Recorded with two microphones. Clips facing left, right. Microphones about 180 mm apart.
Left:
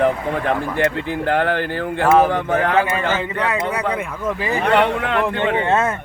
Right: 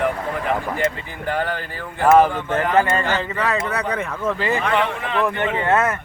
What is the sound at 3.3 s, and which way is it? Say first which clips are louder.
Speech: left 1 dB; 15° left (ahead or behind).